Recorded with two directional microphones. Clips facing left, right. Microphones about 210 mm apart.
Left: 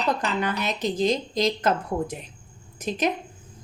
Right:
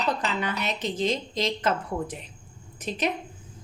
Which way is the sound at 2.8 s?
45° left (ahead or behind).